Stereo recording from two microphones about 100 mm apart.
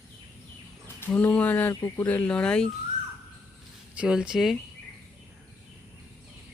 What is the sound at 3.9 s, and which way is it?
Speech, 10° right (ahead or behind).